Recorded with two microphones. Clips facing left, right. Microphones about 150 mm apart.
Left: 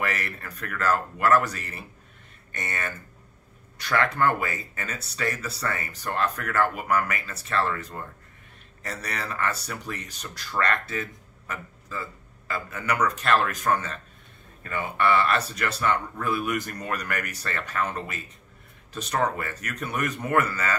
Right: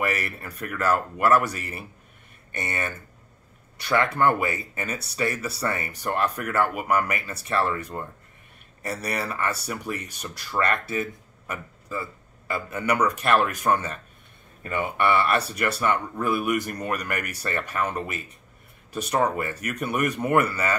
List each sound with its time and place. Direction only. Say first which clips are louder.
0.0 s speech: right 3 dB; 10° right (ahead or behind)